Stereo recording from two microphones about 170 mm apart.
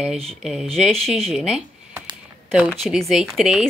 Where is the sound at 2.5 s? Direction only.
Centre (ahead or behind).